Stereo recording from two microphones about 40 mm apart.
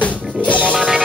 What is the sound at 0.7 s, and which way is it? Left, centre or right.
Music, centre.